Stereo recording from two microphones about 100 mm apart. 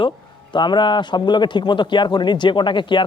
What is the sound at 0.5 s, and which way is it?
Speech, 50° left (ahead or behind).